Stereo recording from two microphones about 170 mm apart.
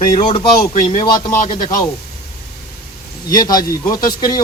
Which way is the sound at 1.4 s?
50° left (ahead or behind).